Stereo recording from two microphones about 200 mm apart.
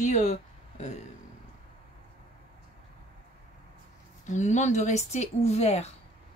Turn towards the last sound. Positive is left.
turn(degrees=35)  # may be behind; listen again after turning